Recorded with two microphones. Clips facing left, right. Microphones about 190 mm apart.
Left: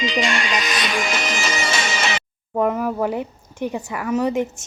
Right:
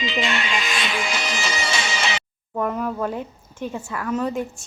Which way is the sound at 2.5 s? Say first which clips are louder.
Left 4 dB; 15° left (ahead or behind).